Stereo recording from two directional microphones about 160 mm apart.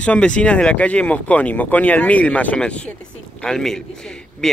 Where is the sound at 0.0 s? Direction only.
5° left (ahead or behind).